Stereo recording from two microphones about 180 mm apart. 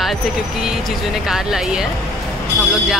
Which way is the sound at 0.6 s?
Centre (ahead or behind).